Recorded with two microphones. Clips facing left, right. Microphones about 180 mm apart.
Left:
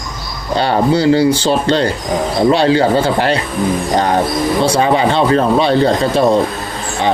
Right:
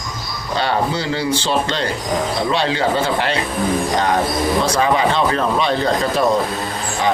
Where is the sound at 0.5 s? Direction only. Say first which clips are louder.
Left 6 dB; 30° left (ahead or behind).